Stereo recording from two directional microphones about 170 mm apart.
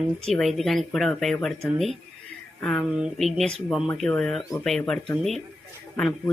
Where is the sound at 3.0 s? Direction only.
Centre (ahead or behind).